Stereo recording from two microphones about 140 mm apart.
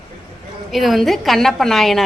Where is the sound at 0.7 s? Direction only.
Centre (ahead or behind).